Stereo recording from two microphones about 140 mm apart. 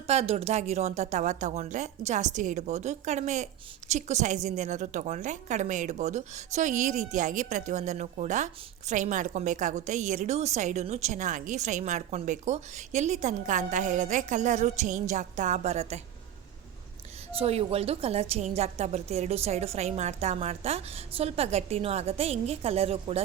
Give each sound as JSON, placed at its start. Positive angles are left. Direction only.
{"t": 0.1, "sound": "a woman's voice", "side_deg": -50}
{"t": 17.3, "sound": "a woman's voice", "side_deg": -45}